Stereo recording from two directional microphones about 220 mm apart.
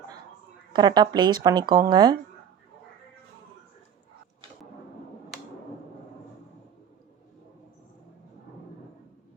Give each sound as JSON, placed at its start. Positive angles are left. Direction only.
{"t": 0.7, "sound": "speech", "side_deg": -20}